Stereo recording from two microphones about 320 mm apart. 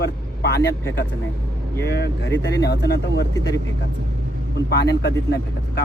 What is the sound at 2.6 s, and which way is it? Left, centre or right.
Speech, left.